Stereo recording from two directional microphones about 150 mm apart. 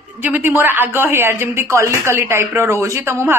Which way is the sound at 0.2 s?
10° right (ahead or behind).